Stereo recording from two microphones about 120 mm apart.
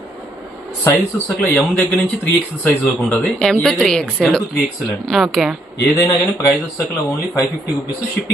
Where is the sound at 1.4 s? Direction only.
15° left (ahead or behind).